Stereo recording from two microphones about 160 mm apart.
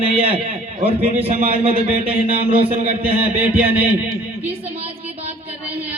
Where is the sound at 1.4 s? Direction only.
35° right (ahead or behind).